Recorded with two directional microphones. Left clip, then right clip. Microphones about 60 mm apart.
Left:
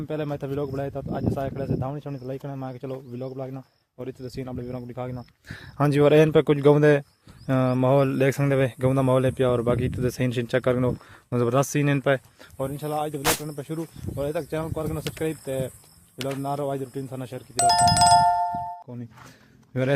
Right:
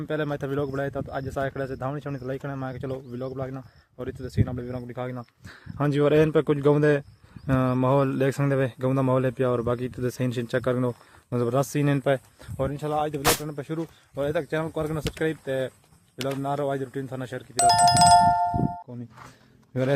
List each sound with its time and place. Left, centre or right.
0.0 s speech: centre; by 2.0 s right
2.0 s speech: right
3.1 s speech: right
4.0 s speech: centre
5.5 s speech: centre
7.4 s speech: centre
10.1 s speech: left
11.4 s speech: left
11.8 s speech: centre
14.2 s speech: centre
16.1 s speech: centre
17.6 s speech: centre